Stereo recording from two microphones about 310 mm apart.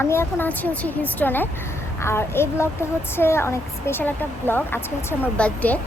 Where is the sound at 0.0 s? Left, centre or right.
Centre.